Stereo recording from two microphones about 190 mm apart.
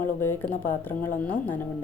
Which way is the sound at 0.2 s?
10° left (ahead or behind).